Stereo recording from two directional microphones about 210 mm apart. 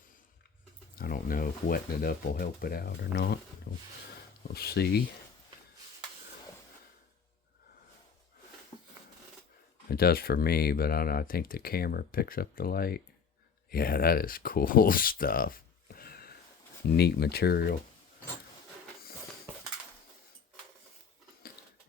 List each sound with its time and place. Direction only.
0.9 s speech: 45° left (ahead or behind)
9.9 s speech: 45° left (ahead or behind)